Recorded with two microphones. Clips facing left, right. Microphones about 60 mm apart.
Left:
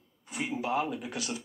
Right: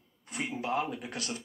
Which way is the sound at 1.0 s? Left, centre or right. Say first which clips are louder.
Left 2 dB; right.